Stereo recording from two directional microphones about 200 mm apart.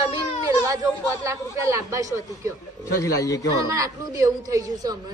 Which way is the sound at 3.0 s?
15° left (ahead or behind).